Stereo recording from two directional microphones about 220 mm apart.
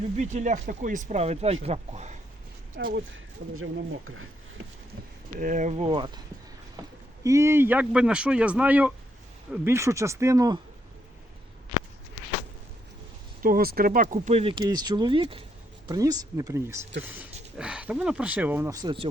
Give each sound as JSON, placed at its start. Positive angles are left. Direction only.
{"t": 0.2, "sound": "speech", "side_deg": -35}
{"t": 2.7, "sound": "speech", "side_deg": -50}
{"t": 3.5, "sound": "speech", "side_deg": -70}
{"t": 5.4, "sound": "speech", "side_deg": -35}
{"t": 7.3, "sound": "speech", "side_deg": -15}
{"t": 13.4, "sound": "speech", "side_deg": -40}